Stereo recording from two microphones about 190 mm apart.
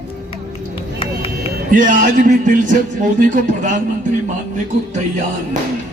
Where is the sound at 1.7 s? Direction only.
45° right (ahead or behind).